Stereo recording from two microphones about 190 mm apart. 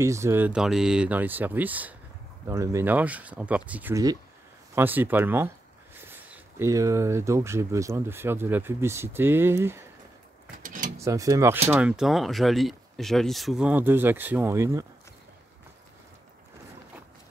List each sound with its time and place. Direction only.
0.0 s speech: 15° right (ahead or behind)
10.6 s a sound: 45° right (ahead or behind)
11.0 s speech: 15° right (ahead or behind)
11.7 s speech: 5° right (ahead or behind)